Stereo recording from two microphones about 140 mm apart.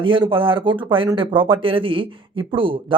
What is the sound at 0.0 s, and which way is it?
Speech, 35° right (ahead or behind).